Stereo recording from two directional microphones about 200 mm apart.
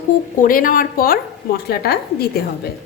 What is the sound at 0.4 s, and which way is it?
A woman's voice, 45° left (ahead or behind).